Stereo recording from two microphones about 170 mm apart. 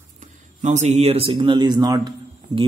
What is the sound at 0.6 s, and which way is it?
A man's voice, 45° right (ahead or behind).